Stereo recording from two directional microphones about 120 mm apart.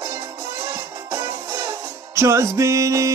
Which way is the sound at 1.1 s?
20° right (ahead or behind).